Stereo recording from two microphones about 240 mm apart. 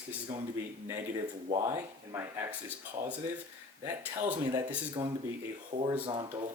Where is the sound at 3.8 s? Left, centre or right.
Centre.